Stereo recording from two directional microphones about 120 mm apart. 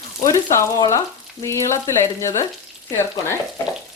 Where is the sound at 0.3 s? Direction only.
25° left (ahead or behind).